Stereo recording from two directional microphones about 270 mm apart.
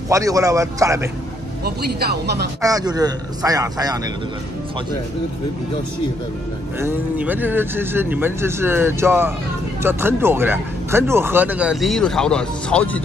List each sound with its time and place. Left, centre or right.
0.1 s speech: centre
1.6 s speech: right
2.6 s speech: centre
6.8 s speech: centre